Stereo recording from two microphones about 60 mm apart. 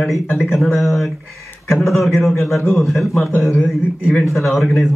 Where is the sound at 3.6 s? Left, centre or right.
Left.